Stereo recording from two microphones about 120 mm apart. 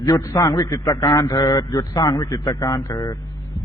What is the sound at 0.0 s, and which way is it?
A man's voice, 30° left (ahead or behind).